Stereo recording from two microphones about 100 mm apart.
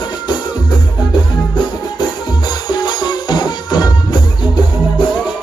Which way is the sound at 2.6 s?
50° left (ahead or behind).